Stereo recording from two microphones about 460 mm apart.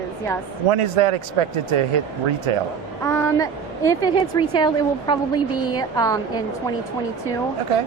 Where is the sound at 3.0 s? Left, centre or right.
Centre.